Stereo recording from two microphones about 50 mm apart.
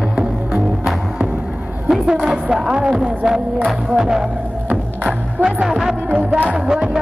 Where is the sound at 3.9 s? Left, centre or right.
Centre.